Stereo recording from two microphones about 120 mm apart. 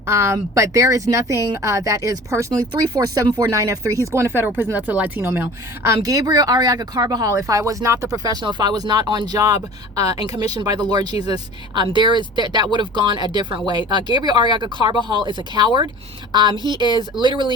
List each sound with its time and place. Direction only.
0.0 s speech: 20° right (ahead or behind); by 16.6 s 40° right (ahead or behind)
16.6 s speech: 35° left (ahead or behind)
17.0 s speech: 40° right (ahead or behind)